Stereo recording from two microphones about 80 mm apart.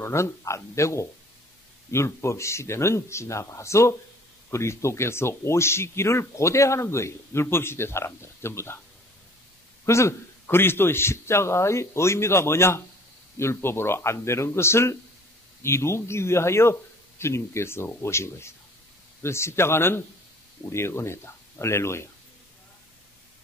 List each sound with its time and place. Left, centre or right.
0.0 s speech: left
9.8 s speech: left